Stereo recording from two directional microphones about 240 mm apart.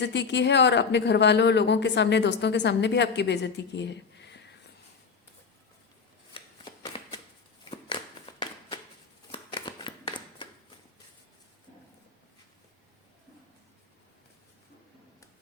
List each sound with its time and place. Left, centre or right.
0.0 s speech: left
6.3 s shuffling cards: left
7.7 s a sound: left
9.3 s shuffling cards: centre